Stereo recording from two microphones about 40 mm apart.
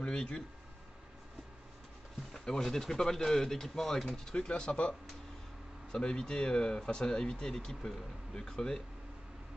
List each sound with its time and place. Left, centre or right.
0.0 s speech: left
2.3 s speech: centre
4.3 s speech: left